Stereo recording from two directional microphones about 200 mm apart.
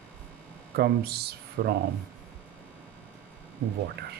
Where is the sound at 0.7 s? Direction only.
50° right (ahead or behind).